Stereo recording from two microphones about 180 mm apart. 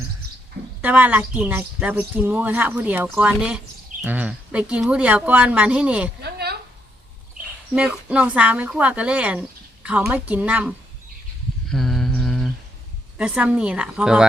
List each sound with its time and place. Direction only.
0.8 s a woman's voice: 10° right (ahead or behind)
6.2 s a sound: 65° right (ahead or behind)
7.8 s a woman's voice: 5° right (ahead or behind)
11.7 s mantra: centre (ahead or behind)
13.1 s a woman's voice: 5° right (ahead or behind)